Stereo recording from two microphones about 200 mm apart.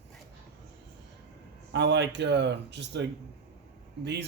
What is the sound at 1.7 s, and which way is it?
Speech, 60° right (ahead or behind).